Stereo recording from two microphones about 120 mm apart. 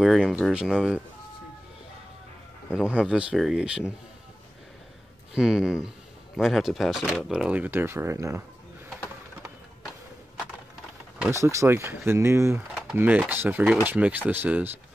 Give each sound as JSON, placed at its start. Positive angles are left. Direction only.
{"t": 0.0, "sound": "speech", "side_deg": 0}
{"t": 2.7, "sound": "speech", "side_deg": -10}
{"t": 5.3, "sound": "speech", "side_deg": -5}
{"t": 11.2, "sound": "speech", "side_deg": -25}